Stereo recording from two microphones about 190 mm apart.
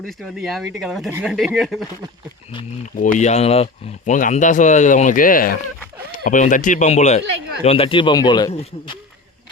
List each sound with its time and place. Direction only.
0.0 s speech: centre (ahead or behind)
2.8 s speech: 40° left (ahead or behind); by 8.5 s 20° left (ahead or behind)